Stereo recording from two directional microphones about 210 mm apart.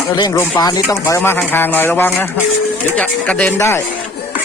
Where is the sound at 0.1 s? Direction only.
15° left (ahead or behind).